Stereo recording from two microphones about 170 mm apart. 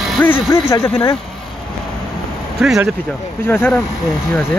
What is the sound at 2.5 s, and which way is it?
Speech, 5° right (ahead or behind).